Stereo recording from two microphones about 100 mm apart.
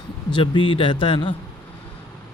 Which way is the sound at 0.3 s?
55° left (ahead or behind).